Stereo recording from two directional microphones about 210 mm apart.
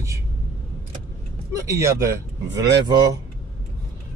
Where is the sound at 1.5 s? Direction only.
15° right (ahead or behind).